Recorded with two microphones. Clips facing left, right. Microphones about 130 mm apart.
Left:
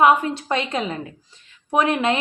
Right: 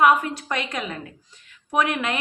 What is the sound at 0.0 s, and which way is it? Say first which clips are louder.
Speech: left 2 dB; 25° left (ahead or behind).